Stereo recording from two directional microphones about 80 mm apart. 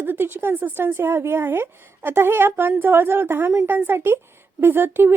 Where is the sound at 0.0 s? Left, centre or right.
Right.